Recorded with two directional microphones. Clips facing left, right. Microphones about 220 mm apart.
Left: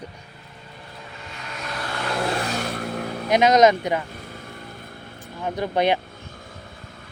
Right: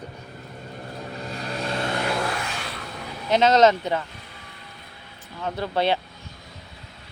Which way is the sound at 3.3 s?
15° left (ahead or behind).